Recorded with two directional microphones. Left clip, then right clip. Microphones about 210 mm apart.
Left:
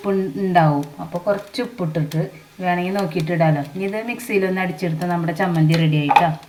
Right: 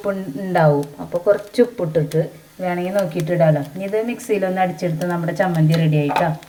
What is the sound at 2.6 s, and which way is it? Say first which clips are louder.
Speech: right 1 dB; 35° right (ahead or behind).